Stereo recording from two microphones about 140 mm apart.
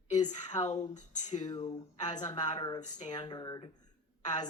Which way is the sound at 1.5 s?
35° left (ahead or behind).